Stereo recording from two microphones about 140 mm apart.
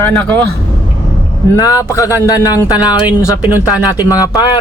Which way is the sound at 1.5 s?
25° left (ahead or behind).